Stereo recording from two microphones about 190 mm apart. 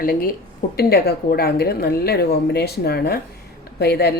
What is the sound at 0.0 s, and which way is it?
Speech, 50° left (ahead or behind).